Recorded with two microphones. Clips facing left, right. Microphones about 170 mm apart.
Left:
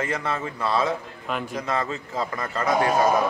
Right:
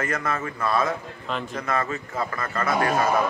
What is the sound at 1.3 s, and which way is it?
A man's voice, 10° left (ahead or behind).